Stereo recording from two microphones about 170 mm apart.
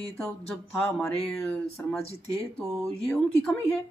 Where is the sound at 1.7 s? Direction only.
15° left (ahead or behind).